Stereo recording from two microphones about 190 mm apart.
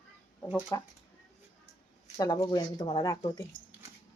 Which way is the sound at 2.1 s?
20° left (ahead or behind).